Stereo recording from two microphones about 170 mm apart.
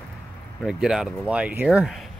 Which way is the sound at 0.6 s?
5° right (ahead or behind).